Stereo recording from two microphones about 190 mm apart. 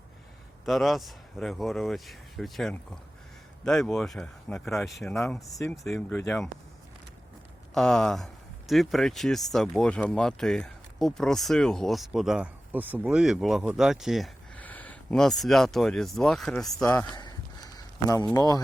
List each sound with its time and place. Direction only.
0.6 s speech: centre (ahead or behind)
7.7 s speech: 5° left (ahead or behind)
16.6 s speech: 20° left (ahead or behind)
17.2 s a sound: 20° left (ahead or behind)
18.3 s speech: 20° left (ahead or behind)